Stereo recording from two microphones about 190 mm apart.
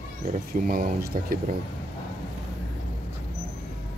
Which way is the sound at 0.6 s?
50° right (ahead or behind).